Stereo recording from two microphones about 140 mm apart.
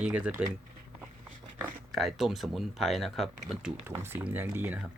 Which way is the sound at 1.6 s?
Centre (ahead or behind).